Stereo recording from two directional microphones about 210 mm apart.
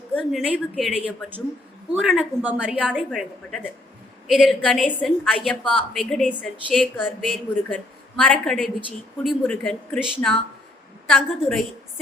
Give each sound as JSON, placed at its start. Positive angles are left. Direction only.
{"t": 0.1, "sound": "a woman's voice", "side_deg": 5}